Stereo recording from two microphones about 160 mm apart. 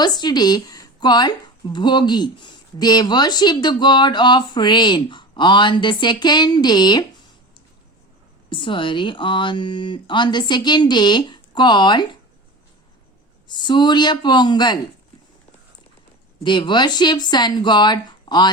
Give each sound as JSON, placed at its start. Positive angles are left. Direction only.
{"t": 0.0, "sound": "a woman's voice", "side_deg": 25}
{"t": 8.4, "sound": "a woman's voice", "side_deg": 30}
{"t": 13.5, "sound": "a woman's voice", "side_deg": 30}
{"t": 16.4, "sound": "a woman's voice", "side_deg": 30}